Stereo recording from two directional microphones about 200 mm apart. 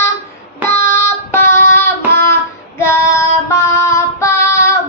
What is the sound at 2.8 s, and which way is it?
Child singing, 10° left (ahead or behind).